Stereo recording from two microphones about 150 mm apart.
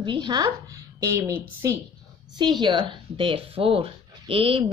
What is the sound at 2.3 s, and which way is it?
Speech, 30° right (ahead or behind).